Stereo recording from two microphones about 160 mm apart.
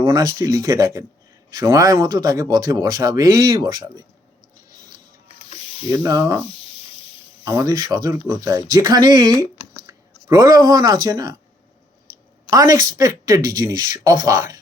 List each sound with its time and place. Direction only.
0.0 s speech: 20° right (ahead or behind)
5.5 s mechanisms: 40° left (ahead or behind)
5.9 s speech: 20° right (ahead or behind)
7.4 s speech: 20° right (ahead or behind)
12.5 s speech: 20° right (ahead or behind)